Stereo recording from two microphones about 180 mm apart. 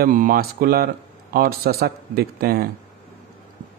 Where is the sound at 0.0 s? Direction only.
50° right (ahead or behind).